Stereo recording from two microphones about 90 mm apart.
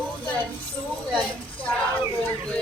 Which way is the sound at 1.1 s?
15° left (ahead or behind).